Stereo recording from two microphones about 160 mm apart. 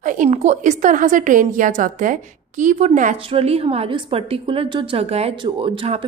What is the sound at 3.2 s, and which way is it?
A woman's voice, 35° right (ahead or behind).